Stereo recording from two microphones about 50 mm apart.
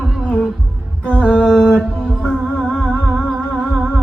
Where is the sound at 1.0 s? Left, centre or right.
Left.